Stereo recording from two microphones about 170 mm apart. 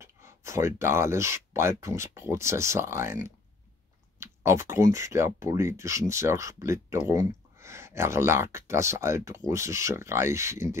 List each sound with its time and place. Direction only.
0.0 s speech: 15° right (ahead or behind)
4.2 s speech: 15° right (ahead or behind)